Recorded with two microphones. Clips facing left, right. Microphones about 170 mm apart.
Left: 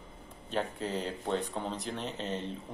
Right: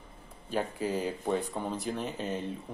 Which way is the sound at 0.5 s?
5° right (ahead or behind).